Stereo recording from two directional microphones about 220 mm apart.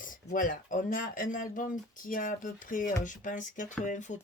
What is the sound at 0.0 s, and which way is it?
Speech, 35° left (ahead or behind).